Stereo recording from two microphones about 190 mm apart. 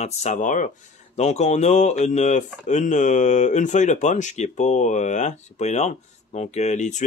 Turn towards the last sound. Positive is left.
turn(degrees=40)  # may be behind; listen again after turning